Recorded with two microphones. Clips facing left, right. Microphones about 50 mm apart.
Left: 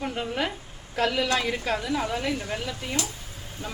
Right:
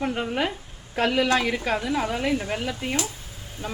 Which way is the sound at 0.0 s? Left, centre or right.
Centre.